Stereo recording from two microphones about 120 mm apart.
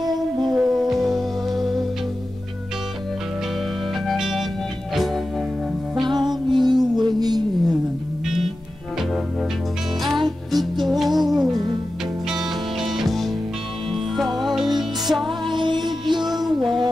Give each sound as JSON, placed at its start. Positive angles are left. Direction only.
{"t": 0.0, "sound": "music", "side_deg": -35}
{"t": 0.6, "sound": "music", "side_deg": -5}
{"t": 4.0, "sound": "music", "side_deg": 0}
{"t": 5.9, "sound": "music", "side_deg": -40}
{"t": 10.0, "sound": "music", "side_deg": 0}
{"t": 15.4, "sound": "music", "side_deg": -40}